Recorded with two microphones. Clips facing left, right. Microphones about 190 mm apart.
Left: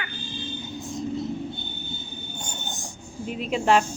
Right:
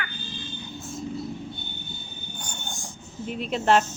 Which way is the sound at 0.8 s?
15° left (ahead or behind).